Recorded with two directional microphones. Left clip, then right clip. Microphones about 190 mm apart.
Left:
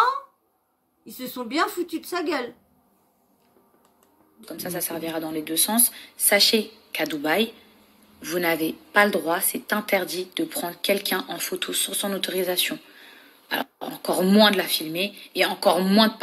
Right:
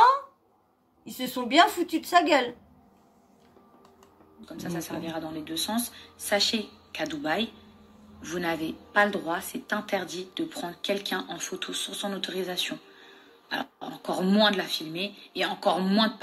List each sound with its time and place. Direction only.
1.0 s a woman's voice: centre (ahead or behind)
4.4 s a woman's voice: 40° left (ahead or behind)